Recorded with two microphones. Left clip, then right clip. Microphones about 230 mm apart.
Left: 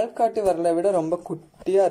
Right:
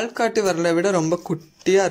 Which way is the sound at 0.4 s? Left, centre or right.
Right.